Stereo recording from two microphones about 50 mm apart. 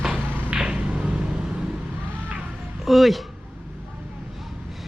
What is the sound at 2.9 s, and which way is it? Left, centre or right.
Speech, centre.